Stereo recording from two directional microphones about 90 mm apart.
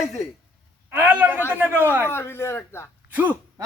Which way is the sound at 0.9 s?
20° right (ahead or behind).